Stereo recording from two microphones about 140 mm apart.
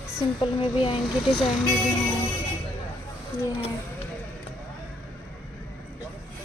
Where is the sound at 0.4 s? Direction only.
40° left (ahead or behind).